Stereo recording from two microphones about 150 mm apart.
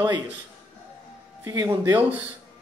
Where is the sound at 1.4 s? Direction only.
20° right (ahead or behind).